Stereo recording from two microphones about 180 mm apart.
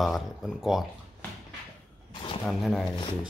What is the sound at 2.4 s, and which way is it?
Speech, centre (ahead or behind).